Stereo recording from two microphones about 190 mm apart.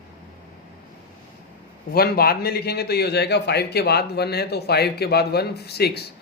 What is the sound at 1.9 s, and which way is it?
A man's voice, 55° left (ahead or behind).